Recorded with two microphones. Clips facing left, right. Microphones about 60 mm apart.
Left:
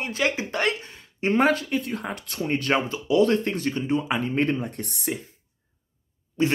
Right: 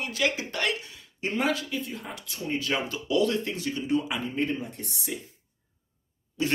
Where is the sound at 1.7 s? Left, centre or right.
Left.